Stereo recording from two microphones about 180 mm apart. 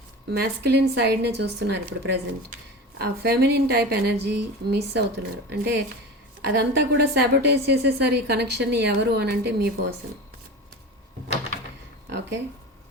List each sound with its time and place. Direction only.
0.3 s a woman's voice: 60° right (ahead or behind)
3.0 s a woman's voice: 60° right (ahead or behind)